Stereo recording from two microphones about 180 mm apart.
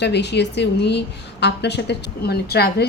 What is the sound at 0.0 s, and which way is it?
A woman's voice, 70° left (ahead or behind).